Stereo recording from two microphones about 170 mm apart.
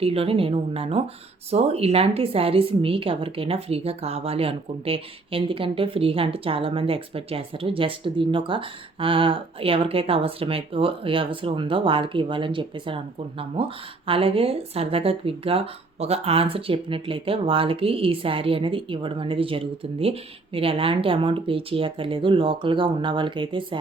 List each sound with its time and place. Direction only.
0.0 s a woman's voice: 35° right (ahead or behind)
14.1 s a woman's voice: 35° right (ahead or behind)